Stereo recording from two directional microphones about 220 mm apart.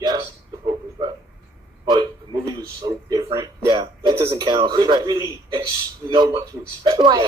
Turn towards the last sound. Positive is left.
turn(degrees=-20)  # may be behind; listen again after turning